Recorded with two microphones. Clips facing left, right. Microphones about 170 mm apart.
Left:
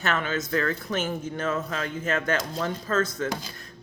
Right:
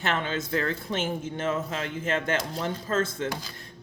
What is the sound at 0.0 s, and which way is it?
Speech, 25° right (ahead or behind).